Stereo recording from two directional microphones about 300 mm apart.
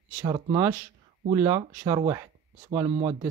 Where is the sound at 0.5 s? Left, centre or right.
Centre.